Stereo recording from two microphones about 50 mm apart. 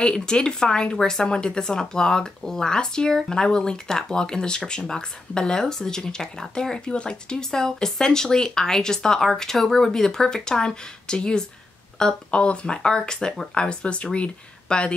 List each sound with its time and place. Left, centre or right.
0.0 s speech: centre